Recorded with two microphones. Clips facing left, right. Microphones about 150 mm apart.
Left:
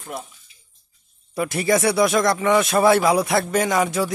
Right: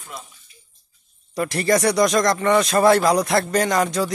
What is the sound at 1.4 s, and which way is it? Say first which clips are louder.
Speech: right 1 dB; 5° left (ahead or behind).